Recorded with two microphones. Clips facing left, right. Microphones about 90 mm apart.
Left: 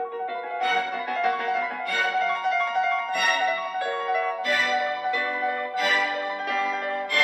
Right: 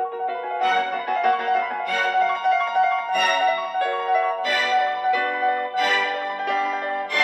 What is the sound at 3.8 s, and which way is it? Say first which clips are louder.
Music: right 5 dB; 55° right (ahead or behind).